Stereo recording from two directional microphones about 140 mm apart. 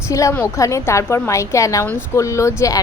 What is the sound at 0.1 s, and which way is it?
A woman's voice, 20° left (ahead or behind).